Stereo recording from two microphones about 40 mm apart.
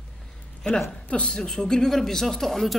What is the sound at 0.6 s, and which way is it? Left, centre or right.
Speech, left.